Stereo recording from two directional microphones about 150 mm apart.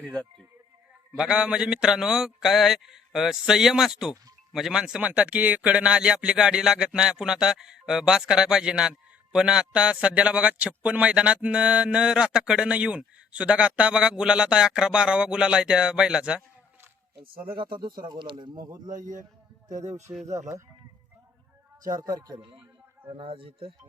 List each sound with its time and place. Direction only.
0.0 s a man's voice: 5° left (ahead or behind)
1.1 s a man's voice: 5° right (ahead or behind)
17.5 s speech: 35° right (ahead or behind)
18.9 s a man's voice: 60° right (ahead or behind)
20.3 s a man's voice: 20° right (ahead or behind)
21.9 s a man's voice: 25° right (ahead or behind)
23.1 s speech: 35° right (ahead or behind)